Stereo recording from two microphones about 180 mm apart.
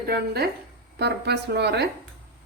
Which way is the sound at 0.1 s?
60° right (ahead or behind).